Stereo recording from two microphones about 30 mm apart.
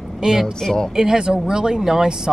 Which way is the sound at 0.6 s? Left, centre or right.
Centre.